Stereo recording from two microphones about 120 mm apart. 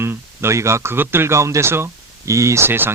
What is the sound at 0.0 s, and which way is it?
Speech, 20° right (ahead or behind).